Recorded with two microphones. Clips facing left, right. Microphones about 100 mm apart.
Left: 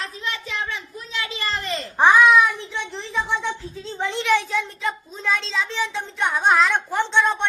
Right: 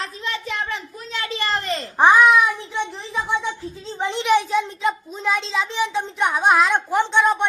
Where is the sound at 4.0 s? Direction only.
20° right (ahead or behind).